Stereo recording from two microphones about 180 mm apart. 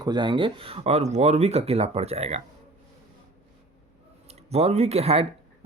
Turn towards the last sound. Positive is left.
turn(degrees=-35)  # may be behind; listen again after turning